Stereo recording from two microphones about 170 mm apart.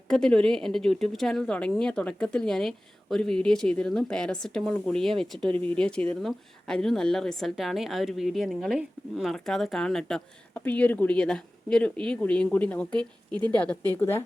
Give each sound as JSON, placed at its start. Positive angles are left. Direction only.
{"t": 0.1, "sound": "speech", "side_deg": 5}
{"t": 13.3, "sound": "a woman's voice", "side_deg": -25}
{"t": 13.6, "sound": "speech", "side_deg": 10}